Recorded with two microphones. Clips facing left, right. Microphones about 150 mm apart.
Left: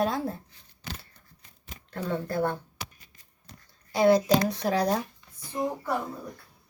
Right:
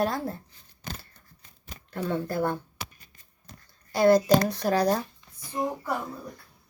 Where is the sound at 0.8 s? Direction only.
45° right (ahead or behind).